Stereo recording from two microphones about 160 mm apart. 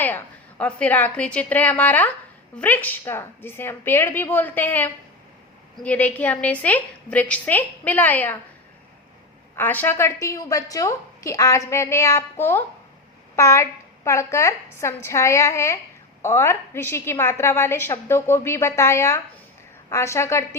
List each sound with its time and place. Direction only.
0.0 s a woman's voice: 10° left (ahead or behind)
9.6 s a woman's voice: 10° left (ahead or behind)